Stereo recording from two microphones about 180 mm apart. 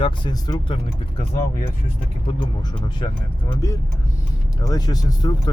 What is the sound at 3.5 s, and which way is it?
Speech, 15° left (ahead or behind).